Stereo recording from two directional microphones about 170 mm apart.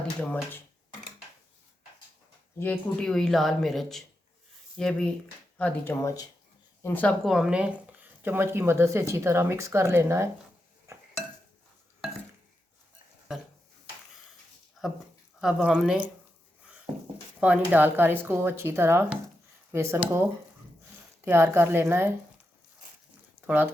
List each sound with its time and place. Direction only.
0.2 s speech: 5° left (ahead or behind)
2.6 s speech: 10° left (ahead or behind)
7.3 s speech: centre (ahead or behind)
10.9 s dishes: 15° right (ahead or behind)
14.8 s a sound: centre (ahead or behind)
15.4 s speech: centre (ahead or behind)
17.4 s speech: 10° right (ahead or behind)
21.2 s speech: 15° right (ahead or behind)